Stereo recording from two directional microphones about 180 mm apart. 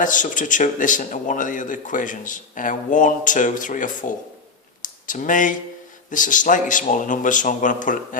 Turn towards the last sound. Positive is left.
turn(degrees=45)  # may be behind; listen again after turning